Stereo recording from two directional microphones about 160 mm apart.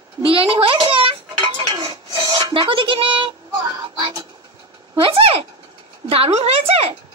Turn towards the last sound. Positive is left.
turn(degrees=-40)  # may be behind; listen again after turning